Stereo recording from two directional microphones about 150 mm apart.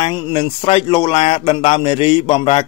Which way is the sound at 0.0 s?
40° left (ahead or behind).